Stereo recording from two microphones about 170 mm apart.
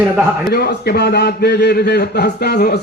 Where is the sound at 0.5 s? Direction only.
65° left (ahead or behind).